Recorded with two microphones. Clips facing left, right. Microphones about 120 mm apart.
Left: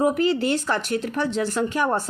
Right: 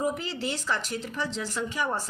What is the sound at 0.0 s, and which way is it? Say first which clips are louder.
Speech: left 9 dB; 60° left (ahead or behind).